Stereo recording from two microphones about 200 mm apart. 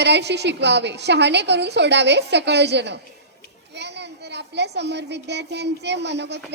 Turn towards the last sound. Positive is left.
turn(degrees=-60)  # may be behind; listen again after turning